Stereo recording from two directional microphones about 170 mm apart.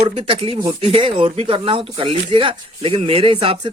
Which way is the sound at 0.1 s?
35° right (ahead or behind).